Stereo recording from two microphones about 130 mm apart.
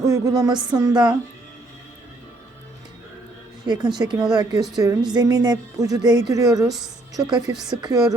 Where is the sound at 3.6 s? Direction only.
30° right (ahead or behind).